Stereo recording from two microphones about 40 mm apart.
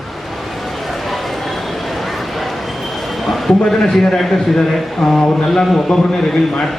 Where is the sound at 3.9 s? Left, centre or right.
Centre.